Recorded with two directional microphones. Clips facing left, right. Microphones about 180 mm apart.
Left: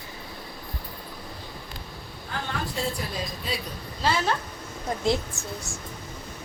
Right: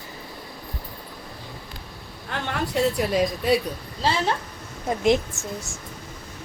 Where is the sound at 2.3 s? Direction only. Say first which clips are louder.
Right 6 dB; 75° right (ahead or behind).